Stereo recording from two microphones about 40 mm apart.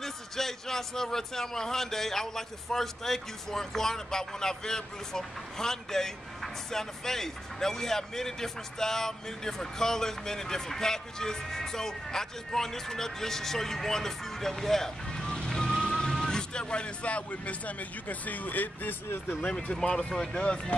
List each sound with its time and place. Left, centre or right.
0.0 s a man's voice: centre; by 18.9 s left
19.0 s speech: left
19.5 s speech: left